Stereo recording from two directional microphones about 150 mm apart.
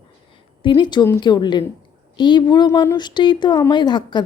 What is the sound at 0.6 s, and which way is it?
A woman's voice, 30° left (ahead or behind).